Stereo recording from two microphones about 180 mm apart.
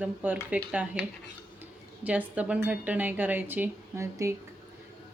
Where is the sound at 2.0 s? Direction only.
10° right (ahead or behind).